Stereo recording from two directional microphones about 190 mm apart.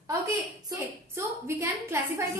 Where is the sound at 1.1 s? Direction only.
15° right (ahead or behind).